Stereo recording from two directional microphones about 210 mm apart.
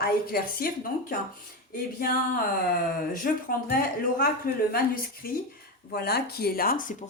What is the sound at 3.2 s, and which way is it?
Speech, 40° left (ahead or behind).